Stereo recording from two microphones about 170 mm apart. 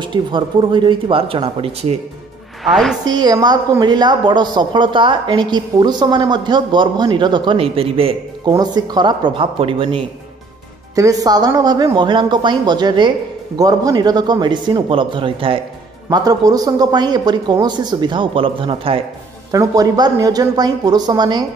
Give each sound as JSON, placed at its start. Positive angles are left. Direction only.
{"t": 0.0, "sound": "a woman's voice", "side_deg": -25}
{"t": 2.6, "sound": "a woman's voice", "side_deg": 0}
{"t": 3.1, "sound": "a woman's voice", "side_deg": -25}
{"t": 11.0, "sound": "a woman's voice", "side_deg": -20}
{"t": 19.5, "sound": "a woman's voice", "side_deg": -20}